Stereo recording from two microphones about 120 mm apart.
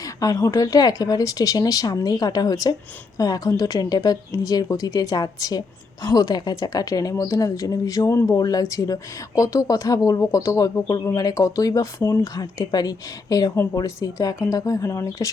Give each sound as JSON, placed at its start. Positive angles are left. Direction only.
{"t": 0.0, "sound": "speech", "side_deg": 30}